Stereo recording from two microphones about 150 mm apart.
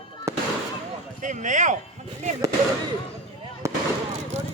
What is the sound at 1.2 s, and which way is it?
Speech, 55° right (ahead or behind).